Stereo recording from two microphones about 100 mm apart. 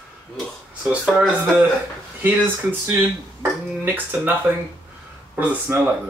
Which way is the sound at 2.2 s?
20° right (ahead or behind).